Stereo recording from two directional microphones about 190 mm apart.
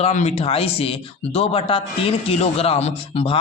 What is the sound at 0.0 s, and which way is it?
Speech, 35° left (ahead or behind).